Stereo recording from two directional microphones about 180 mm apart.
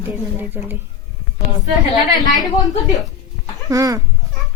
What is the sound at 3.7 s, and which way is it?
Speech, 20° right (ahead or behind).